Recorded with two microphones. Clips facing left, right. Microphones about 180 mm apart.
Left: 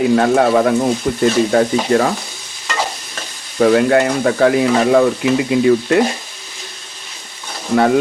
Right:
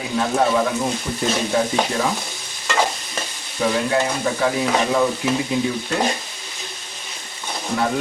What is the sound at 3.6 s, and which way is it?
Stir, 65° left (ahead or behind).